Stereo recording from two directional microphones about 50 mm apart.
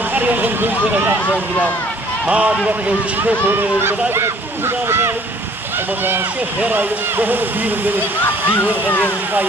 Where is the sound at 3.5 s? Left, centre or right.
Right.